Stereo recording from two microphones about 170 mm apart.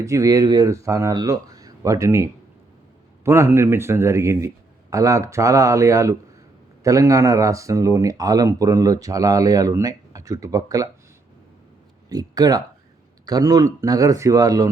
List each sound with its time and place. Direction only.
0.0 s a man's voice: 20° right (ahead or behind)
12.0 s speech: 20° right (ahead or behind)